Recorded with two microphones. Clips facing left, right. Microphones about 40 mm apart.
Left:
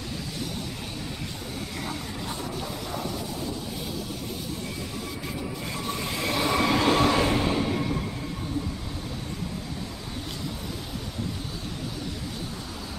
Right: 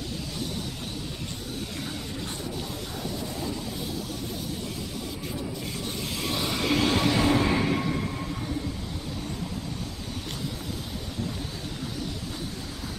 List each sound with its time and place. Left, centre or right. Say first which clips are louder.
6.0 s train: left 4 dB; centre
6.7 s train: even; centre
7.5 s a sound: right 1 dB; right